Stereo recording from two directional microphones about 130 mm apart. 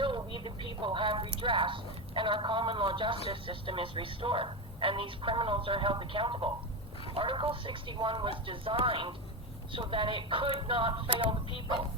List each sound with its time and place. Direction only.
0.0 s speech: 40° right (ahead or behind)